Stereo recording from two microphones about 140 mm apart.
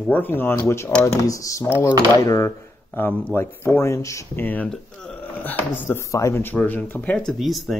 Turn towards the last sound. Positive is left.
turn(degrees=0)  # may be behind; listen again after turning